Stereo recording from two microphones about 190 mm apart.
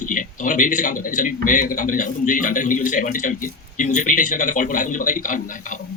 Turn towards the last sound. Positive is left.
turn(degrees=45)  # may be behind; listen again after turning